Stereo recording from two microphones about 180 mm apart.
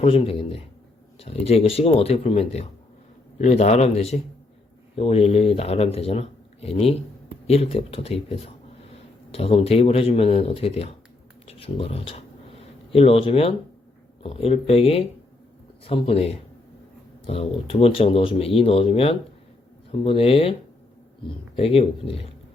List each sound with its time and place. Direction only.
0.0 s speech: 30° left (ahead or behind)
11.4 s a sound: 35° left (ahead or behind)
14.2 s speech: 30° left (ahead or behind)